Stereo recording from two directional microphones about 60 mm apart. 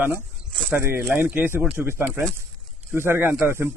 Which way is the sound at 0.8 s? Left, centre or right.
Right.